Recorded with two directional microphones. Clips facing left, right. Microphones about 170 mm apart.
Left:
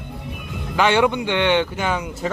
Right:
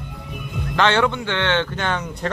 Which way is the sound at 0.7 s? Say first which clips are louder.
Left 1 dB; 10° left (ahead or behind).